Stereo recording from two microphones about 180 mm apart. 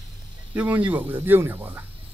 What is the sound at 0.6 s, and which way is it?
Speech, 10° right (ahead or behind).